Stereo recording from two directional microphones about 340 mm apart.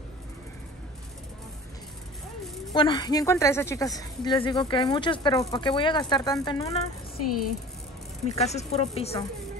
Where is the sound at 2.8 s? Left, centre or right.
Centre.